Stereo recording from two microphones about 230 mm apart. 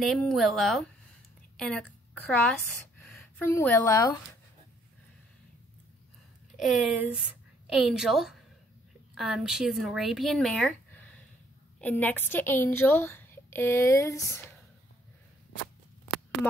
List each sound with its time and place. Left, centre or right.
0.0 s a woman's voice: centre
6.5 s a woman's voice: centre